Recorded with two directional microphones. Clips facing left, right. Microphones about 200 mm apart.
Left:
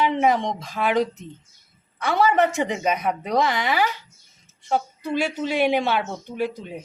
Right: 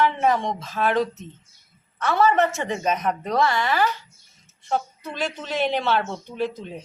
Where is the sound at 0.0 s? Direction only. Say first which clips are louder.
Left 1 dB; 15° left (ahead or behind).